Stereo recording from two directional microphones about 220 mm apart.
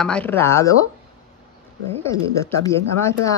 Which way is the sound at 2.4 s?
15° left (ahead or behind).